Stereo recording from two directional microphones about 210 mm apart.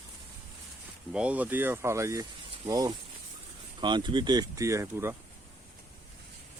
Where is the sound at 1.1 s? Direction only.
5° right (ahead or behind).